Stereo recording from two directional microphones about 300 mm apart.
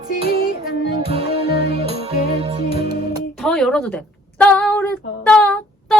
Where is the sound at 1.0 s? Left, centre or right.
Centre.